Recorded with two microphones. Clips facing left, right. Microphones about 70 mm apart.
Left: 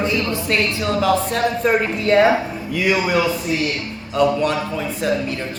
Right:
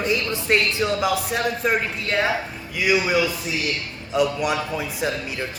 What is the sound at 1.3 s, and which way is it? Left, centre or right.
Speech, centre.